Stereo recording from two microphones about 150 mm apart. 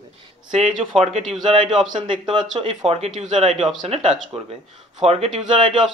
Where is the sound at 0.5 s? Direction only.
45° right (ahead or behind).